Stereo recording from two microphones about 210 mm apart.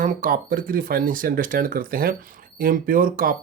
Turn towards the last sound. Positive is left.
turn(degrees=-40)  # may be behind; listen again after turning